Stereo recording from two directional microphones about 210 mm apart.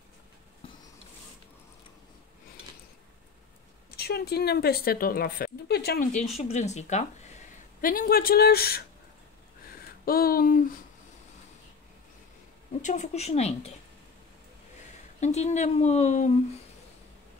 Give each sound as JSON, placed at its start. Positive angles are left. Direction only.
{"t": 3.9, "sound": "a woman's voice", "side_deg": 50}
{"t": 6.3, "sound": "a woman's voice", "side_deg": 30}
{"t": 9.7, "sound": "a sound", "side_deg": 45}
{"t": 12.8, "sound": "a woman's voice", "side_deg": 35}
{"t": 15.1, "sound": "a woman's voice", "side_deg": 30}